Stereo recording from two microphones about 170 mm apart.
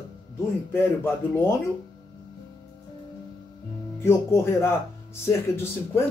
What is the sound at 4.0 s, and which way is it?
Speech, 15° left (ahead or behind).